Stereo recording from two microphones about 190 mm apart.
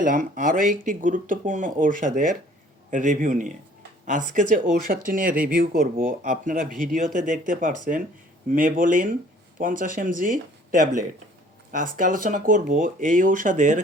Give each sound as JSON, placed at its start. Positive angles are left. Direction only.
{"t": 0.0, "sound": "speech", "side_deg": -45}